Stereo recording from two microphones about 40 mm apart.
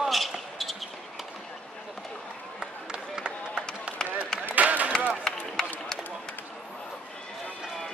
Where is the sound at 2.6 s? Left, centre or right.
Right.